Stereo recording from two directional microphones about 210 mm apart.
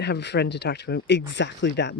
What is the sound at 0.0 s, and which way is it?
Speech, 55° left (ahead or behind).